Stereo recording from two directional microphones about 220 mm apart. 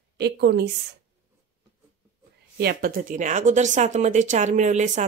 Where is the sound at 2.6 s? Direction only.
45° right (ahead or behind).